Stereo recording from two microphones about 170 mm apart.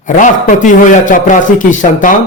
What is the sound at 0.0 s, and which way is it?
A man's voice, 50° left (ahead or behind).